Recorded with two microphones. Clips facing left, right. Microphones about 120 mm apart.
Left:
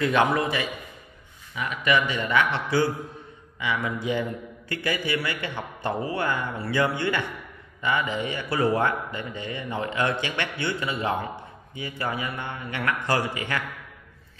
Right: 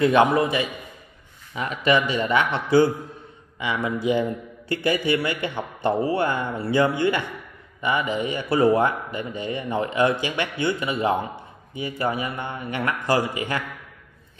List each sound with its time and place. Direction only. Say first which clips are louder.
0.0 s speech: right 4 dB; 20° right (ahead or behind)
1.5 s speech: right 3 dB; 35° right (ahead or behind)